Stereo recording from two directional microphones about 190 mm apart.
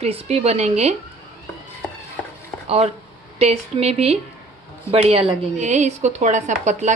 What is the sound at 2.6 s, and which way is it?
A woman's voice, 35° right (ahead or behind).